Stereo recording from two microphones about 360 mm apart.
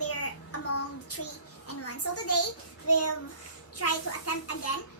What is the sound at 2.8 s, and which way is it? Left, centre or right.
A child's voice, left.